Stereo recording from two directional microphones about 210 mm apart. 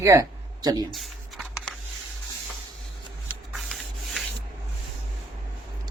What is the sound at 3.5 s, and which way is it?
Rub, centre (ahead or behind).